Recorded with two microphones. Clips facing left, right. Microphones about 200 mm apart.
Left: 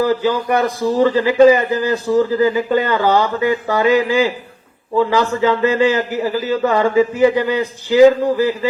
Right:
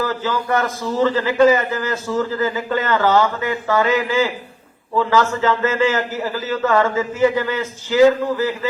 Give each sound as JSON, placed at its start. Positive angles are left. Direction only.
{"t": 0.0, "sound": "a man's voice", "side_deg": 15}